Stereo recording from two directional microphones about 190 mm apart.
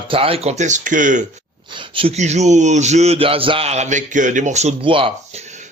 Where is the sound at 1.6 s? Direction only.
25° right (ahead or behind).